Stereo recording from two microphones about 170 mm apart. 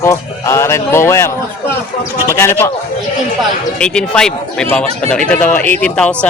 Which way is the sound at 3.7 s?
5° left (ahead or behind).